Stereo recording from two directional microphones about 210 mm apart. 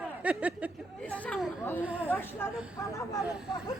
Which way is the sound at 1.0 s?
5° left (ahead or behind).